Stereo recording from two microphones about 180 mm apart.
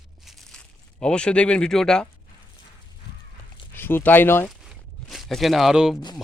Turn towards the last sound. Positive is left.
turn(degrees=20)  # may be behind; listen again after turning